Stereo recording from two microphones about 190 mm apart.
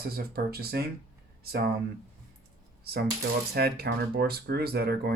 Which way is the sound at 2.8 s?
55° right (ahead or behind).